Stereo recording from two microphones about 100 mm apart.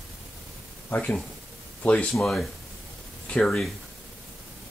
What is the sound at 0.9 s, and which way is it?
Speech, 15° left (ahead or behind).